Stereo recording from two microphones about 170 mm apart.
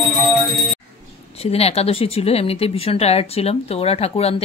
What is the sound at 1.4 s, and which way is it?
Speech, 35° left (ahead or behind).